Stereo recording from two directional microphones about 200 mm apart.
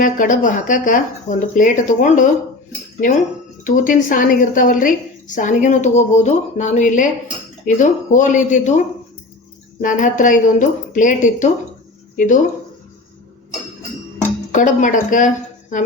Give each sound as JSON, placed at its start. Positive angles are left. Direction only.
{"t": 0.0, "sound": "a woman's voice", "side_deg": 40}
{"t": 3.6, "sound": "a woman's voice", "side_deg": 40}
{"t": 9.8, "sound": "a woman's voice", "side_deg": 40}
{"t": 14.5, "sound": "a woman's voice", "side_deg": 40}